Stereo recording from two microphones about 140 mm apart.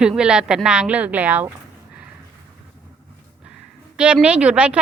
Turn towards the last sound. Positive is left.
turn(degrees=-10)  # may be behind; listen again after turning